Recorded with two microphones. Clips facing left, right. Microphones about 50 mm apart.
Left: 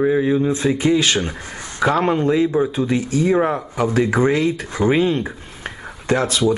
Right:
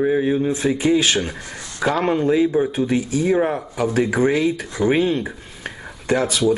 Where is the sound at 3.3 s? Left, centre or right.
Centre.